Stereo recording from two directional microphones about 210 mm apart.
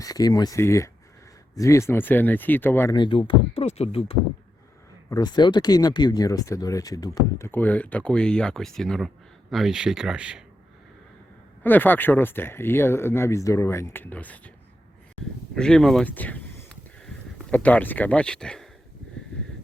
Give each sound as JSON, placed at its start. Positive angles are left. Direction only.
{"t": 0.0, "sound": "speech", "side_deg": 15}
{"t": 2.9, "sound": "speech", "side_deg": 20}
{"t": 11.6, "sound": "speech", "side_deg": 10}
{"t": 15.5, "sound": "speech", "side_deg": 5}